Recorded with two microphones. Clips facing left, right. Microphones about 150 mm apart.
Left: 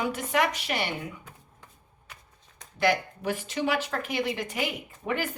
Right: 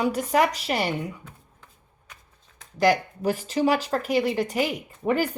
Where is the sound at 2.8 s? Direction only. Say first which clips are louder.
Right 4 dB; 40° right (ahead or behind).